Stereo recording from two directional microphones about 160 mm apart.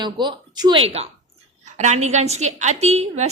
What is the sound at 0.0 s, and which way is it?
A woman's voice, 25° right (ahead or behind).